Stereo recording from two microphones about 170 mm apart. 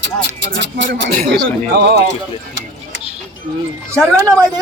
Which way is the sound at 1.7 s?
75° right (ahead or behind).